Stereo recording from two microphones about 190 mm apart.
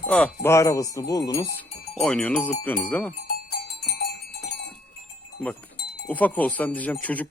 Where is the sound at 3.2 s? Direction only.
55° left (ahead or behind).